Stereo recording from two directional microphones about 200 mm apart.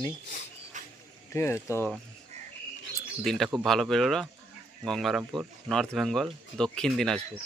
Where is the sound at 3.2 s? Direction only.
Centre (ahead or behind).